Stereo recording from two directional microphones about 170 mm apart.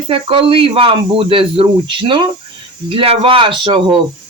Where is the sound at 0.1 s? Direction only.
30° right (ahead or behind).